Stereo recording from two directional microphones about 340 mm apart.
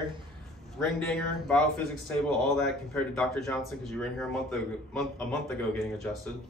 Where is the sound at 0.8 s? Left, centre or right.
Centre.